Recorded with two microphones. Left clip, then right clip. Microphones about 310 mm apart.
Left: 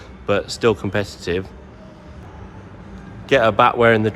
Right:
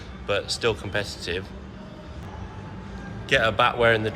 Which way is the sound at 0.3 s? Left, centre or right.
Centre.